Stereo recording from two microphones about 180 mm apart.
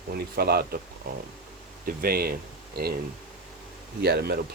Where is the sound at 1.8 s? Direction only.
55° right (ahead or behind).